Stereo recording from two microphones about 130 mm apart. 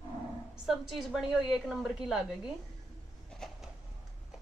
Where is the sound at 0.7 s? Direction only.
Centre (ahead or behind).